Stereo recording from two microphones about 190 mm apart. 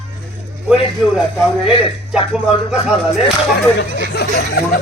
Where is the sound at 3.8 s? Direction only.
55° left (ahead or behind).